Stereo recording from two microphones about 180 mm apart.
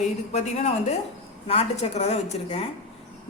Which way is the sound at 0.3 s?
35° left (ahead or behind).